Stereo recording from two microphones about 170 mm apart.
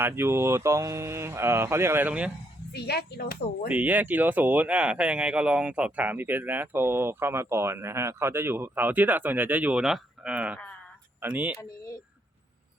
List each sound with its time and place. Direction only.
0.0 s speech: 15° right (ahead or behind)
2.7 s speech: 70° left (ahead or behind)
3.7 s speech: 10° right (ahead or behind)